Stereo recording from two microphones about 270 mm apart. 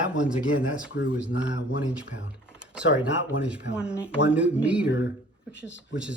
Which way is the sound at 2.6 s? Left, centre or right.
Centre.